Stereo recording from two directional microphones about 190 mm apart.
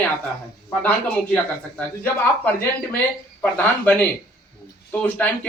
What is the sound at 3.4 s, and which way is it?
Speech, 10° left (ahead or behind).